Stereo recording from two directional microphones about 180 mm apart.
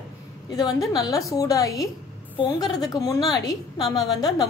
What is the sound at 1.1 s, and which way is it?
A woman's voice, 20° left (ahead or behind).